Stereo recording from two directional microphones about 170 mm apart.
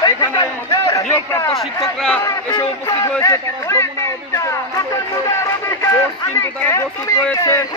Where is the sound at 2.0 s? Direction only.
5° left (ahead or behind).